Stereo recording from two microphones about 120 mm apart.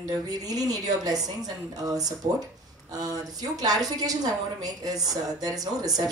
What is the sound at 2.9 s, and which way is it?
Speech, 30° right (ahead or behind).